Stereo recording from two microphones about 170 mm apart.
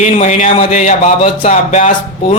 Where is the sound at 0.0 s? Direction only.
45° left (ahead or behind).